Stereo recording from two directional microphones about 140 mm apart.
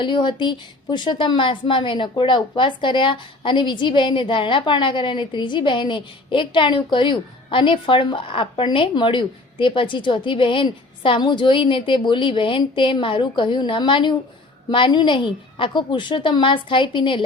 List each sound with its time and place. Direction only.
0.0 s a woman's voice: 35° left (ahead or behind)